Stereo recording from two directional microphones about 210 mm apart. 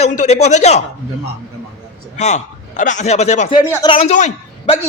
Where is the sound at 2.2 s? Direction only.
35° left (ahead or behind).